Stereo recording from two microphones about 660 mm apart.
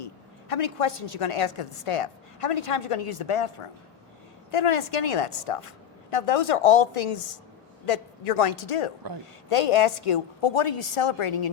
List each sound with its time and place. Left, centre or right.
0.0 s a woman's voice: left